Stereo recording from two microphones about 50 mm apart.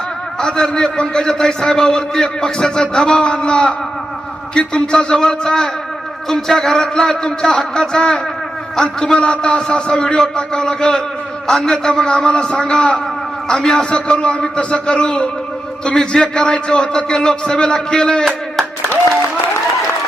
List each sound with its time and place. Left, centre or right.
0.3 s a man's voice: centre